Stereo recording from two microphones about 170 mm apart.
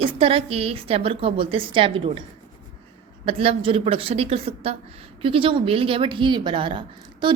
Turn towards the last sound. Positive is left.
turn(degrees=-30)  # may be behind; listen again after turning